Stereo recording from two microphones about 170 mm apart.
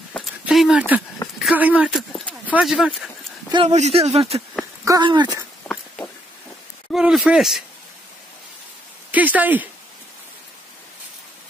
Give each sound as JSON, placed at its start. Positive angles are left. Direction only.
{"t": 0.1, "sound": "a sound", "side_deg": 0}
{"t": 2.5, "sound": "speech", "side_deg": 0}
{"t": 3.5, "sound": "speech", "side_deg": -40}
{"t": 4.8, "sound": "speech", "side_deg": -25}
{"t": 6.9, "sound": "speech", "side_deg": -5}
{"t": 9.1, "sound": "speech", "side_deg": -10}